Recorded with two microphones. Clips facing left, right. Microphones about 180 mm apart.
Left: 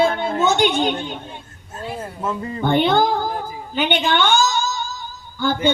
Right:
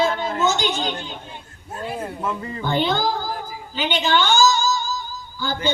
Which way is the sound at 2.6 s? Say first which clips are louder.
Left 5 dB; 60° left (ahead or behind).